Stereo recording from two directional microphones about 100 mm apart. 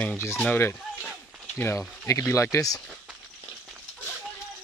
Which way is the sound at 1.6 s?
30° left (ahead or behind).